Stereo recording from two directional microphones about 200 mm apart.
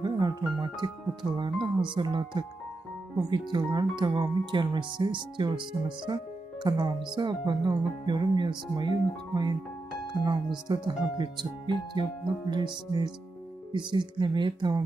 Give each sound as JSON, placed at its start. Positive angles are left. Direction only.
{"t": 0.0, "sound": "speech", "side_deg": -20}
{"t": 10.7, "sound": "speech", "side_deg": -20}